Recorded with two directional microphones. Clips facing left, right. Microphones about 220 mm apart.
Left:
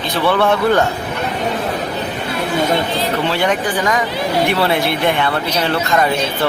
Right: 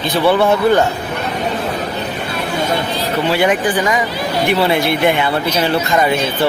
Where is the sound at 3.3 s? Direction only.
5° right (ahead or behind).